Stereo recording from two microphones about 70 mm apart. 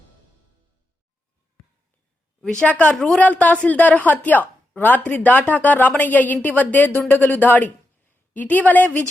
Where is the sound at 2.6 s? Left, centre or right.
Centre.